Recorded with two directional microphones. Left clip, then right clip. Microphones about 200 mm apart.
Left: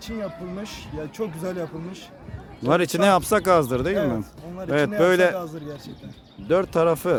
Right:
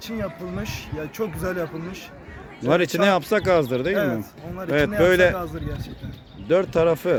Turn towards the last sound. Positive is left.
turn(degrees=10)  # may be behind; listen again after turning